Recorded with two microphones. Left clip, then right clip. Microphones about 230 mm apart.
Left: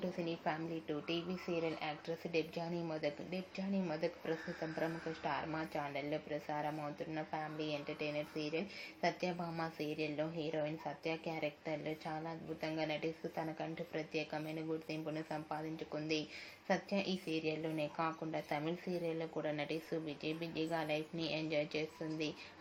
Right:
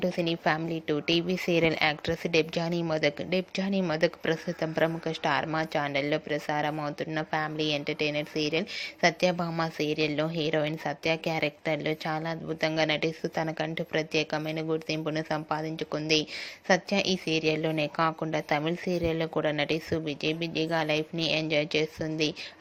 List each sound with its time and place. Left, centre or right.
0.0 s speech: right